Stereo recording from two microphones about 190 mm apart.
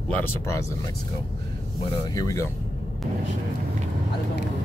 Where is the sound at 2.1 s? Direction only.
15° left (ahead or behind).